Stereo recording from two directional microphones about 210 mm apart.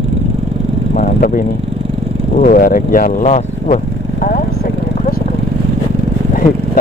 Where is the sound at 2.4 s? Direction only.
45° left (ahead or behind).